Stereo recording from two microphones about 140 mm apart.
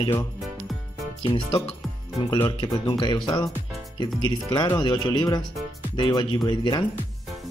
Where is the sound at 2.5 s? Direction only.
25° left (ahead or behind).